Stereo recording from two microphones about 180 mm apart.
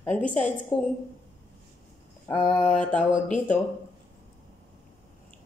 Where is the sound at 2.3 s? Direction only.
25° left (ahead or behind).